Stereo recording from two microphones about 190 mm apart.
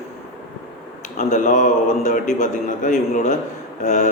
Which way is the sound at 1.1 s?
40° left (ahead or behind).